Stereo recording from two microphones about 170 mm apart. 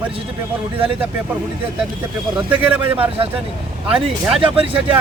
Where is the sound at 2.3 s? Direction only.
5° right (ahead or behind).